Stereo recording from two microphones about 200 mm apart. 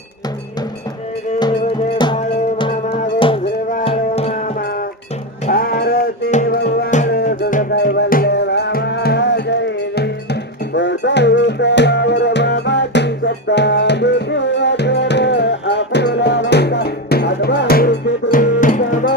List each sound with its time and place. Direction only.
3.8 s music: 30° left (ahead or behind)
5.5 s music: 50° left (ahead or behind)
10.8 s music: 60° left (ahead or behind); by 19.1 s 40° left (ahead or behind)